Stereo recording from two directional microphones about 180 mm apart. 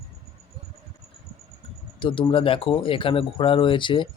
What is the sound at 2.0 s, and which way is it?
Speech, 25° left (ahead or behind).